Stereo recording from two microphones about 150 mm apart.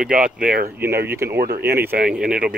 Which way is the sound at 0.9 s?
90° right.